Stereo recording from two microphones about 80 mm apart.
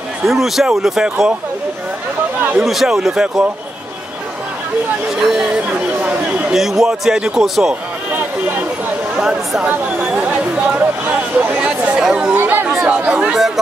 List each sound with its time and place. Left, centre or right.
0.2 s speech: centre
2.6 s speech: centre
5.2 s speech: centre
5.9 s a sound: centre
6.5 s speech: centre
9.1 s a sound: centre
9.7 s chatter: centre
12.4 s chatter: right
12.8 s chatter: centre